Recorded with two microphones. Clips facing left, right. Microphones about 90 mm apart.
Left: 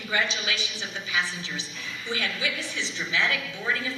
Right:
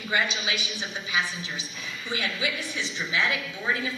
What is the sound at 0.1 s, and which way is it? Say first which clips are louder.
A woman's voice: right 1 dB; 15° right (ahead or behind).